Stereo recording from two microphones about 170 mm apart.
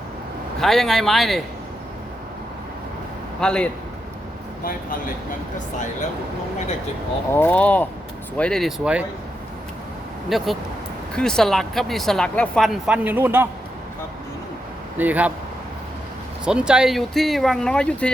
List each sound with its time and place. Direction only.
0.6 s speech: centre (ahead or behind)
3.4 s speech: 5° left (ahead or behind)
4.6 s speech: 55° left (ahead or behind)
7.3 s speech: 10° left (ahead or behind); by 9.0 s 5° right (ahead or behind)
10.2 s speech: centre (ahead or behind)
14.9 s speech: 10° right (ahead or behind)
16.5 s speech: 5° right (ahead or behind)